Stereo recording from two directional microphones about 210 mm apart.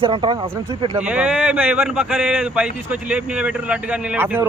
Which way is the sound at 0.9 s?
10° right (ahead or behind).